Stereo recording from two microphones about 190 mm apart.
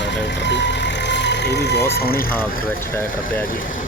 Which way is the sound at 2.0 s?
50° left (ahead or behind).